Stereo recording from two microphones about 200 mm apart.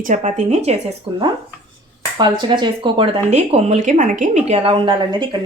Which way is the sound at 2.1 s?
20° right (ahead or behind).